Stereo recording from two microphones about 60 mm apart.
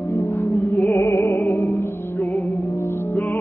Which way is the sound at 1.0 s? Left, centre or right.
Left.